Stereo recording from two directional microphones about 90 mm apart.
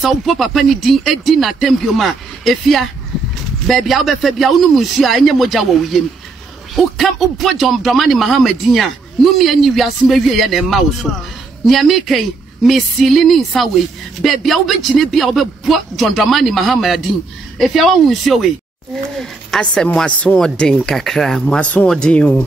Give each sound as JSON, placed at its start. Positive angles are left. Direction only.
{"t": 0.0, "sound": "speech", "side_deg": 0}